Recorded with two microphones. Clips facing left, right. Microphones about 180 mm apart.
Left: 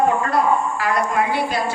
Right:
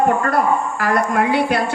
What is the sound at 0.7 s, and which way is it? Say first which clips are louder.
Speech: right 2 dB; 50° right (ahead or behind).